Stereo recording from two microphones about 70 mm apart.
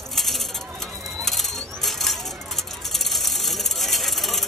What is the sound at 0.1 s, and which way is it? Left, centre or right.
Coin, centre.